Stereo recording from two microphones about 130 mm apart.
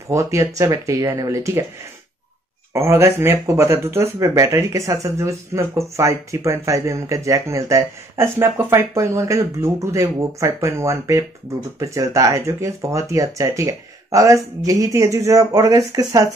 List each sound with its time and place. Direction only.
0.1 s speech: 25° right (ahead or behind)
2.7 s speech: 20° right (ahead or behind)